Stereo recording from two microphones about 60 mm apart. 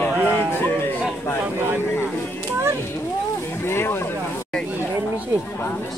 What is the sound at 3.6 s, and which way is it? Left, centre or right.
Speech, left.